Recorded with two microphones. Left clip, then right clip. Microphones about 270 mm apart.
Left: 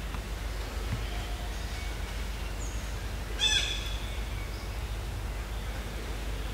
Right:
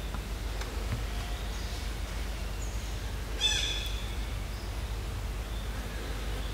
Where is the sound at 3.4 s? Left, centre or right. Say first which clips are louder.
Left 2 dB; centre.